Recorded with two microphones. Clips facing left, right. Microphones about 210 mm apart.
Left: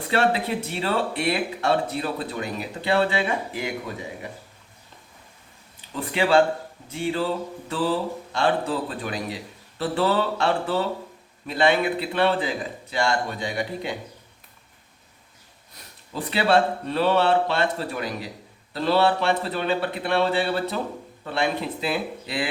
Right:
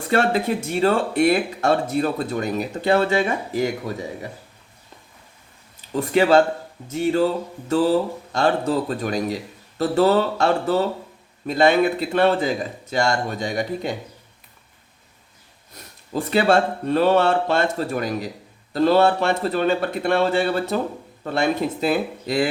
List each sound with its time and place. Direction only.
0.1 s speech: 45° right (ahead or behind)
5.9 s speech: 40° right (ahead or behind)
16.1 s speech: 45° right (ahead or behind)